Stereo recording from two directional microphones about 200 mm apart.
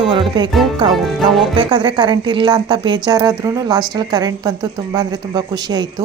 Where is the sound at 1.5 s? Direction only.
25° right (ahead or behind).